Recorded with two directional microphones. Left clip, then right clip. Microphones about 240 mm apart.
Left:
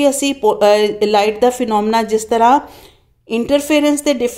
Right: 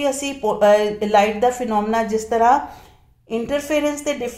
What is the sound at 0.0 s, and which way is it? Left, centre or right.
A woman's voice, left.